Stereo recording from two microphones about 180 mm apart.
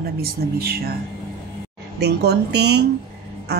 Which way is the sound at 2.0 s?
65° right (ahead or behind).